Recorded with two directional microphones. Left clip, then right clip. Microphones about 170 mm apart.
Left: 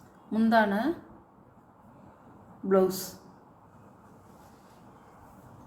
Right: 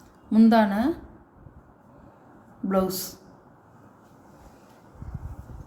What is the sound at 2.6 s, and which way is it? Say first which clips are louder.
Speech: left 1 dB; 50° right (ahead or behind).